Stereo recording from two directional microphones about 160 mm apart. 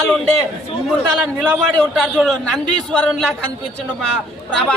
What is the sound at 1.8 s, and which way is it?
A man's voice, 5° left (ahead or behind).